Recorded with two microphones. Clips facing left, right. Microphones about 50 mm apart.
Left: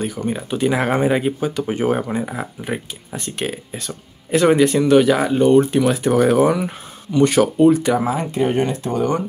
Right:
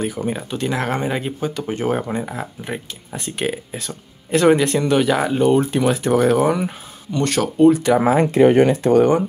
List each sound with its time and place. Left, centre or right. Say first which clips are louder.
0.0 s speech: even; centre
0.5 s speech: left 7 dB; centre
8.2 s speech: right 6 dB; right